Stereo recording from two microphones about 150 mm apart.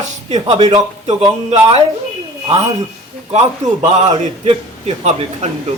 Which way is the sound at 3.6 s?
55° right (ahead or behind).